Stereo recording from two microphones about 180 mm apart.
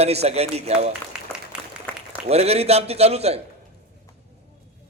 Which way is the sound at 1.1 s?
5° right (ahead or behind).